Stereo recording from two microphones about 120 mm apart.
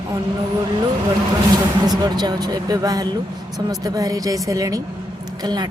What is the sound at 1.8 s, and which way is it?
Speech, 35° right (ahead or behind).